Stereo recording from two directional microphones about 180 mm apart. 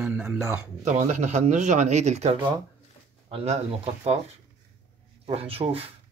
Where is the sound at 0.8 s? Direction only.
40° right (ahead or behind).